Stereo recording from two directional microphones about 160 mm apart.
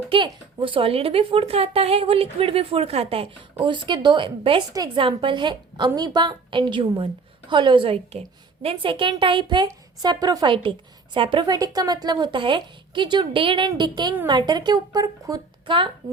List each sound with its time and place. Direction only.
0.1 s a woman's voice: 35° right (ahead or behind)